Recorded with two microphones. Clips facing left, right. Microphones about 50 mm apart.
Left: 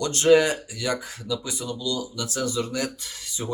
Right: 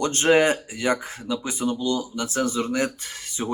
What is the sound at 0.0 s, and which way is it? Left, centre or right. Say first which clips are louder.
Speech: even; right.